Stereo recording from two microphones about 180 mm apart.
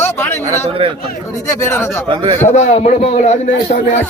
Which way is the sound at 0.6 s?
30° right (ahead or behind).